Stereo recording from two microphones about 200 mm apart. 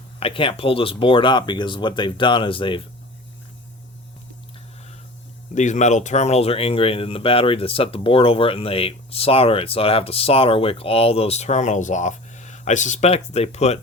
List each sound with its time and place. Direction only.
0.2 s speech: 25° left (ahead or behind)
5.5 s speech: 35° left (ahead or behind)